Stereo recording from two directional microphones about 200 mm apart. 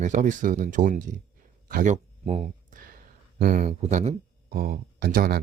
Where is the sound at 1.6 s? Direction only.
40° right (ahead or behind).